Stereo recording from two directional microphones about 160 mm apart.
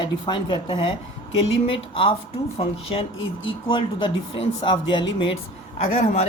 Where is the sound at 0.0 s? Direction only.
30° left (ahead or behind).